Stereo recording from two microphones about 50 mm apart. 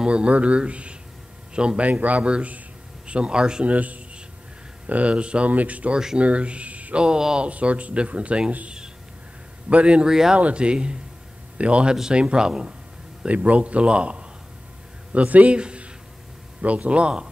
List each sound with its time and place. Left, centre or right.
0.0 s a man's voice: right
1.9 s speech: right; by 3.6 s centre
3.6 s a man's voice: right; by 7.4 s centre
7.4 s speech: right
13.3 s speech: right